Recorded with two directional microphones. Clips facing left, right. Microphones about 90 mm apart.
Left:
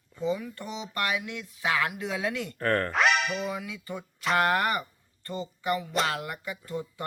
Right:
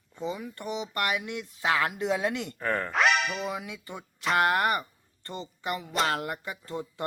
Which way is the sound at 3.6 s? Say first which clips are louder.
Left 3 dB; 25° right (ahead or behind).